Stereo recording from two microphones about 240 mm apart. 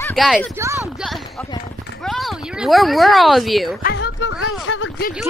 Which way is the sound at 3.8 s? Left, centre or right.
Left.